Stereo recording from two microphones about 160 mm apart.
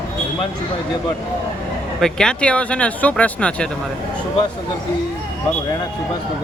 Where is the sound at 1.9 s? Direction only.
5° left (ahead or behind).